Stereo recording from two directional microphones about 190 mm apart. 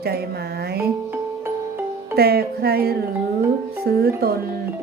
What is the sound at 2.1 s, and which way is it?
Speech, 55° right (ahead or behind).